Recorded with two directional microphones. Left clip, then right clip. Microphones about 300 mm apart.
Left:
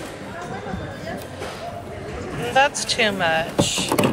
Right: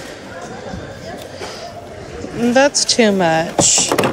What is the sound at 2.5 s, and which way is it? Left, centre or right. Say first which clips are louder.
Speech: right 5 dB; right.